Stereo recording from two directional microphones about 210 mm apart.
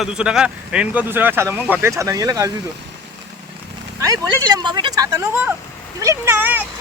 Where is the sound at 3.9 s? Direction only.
15° right (ahead or behind).